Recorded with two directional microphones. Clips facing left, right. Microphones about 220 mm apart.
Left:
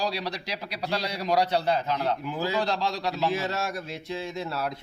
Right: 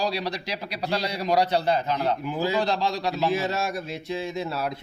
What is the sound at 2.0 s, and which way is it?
Speech, 15° right (ahead or behind).